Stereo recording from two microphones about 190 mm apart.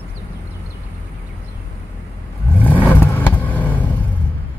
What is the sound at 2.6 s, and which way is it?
Vehicle, 10° left (ahead or behind).